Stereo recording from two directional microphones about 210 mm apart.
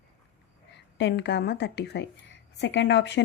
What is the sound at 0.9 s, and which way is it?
A woman's voice, 55° left (ahead or behind).